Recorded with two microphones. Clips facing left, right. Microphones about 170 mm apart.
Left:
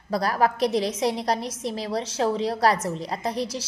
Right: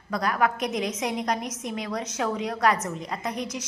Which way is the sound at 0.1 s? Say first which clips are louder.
Left 2 dB; 35° left (ahead or behind).